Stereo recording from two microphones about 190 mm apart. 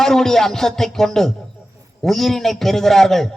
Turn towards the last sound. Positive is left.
turn(degrees=0)  # may be behind; listen again after turning